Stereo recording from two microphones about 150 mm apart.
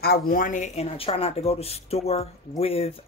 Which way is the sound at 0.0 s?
80° left.